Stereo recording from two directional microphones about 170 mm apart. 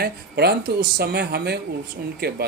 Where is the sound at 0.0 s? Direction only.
70° right (ahead or behind).